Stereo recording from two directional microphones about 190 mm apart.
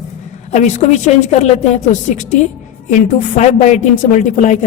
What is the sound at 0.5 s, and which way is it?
A woman's voice, 40° left (ahead or behind).